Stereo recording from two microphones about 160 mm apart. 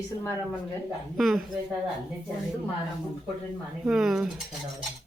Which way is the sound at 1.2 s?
Centre (ahead or behind).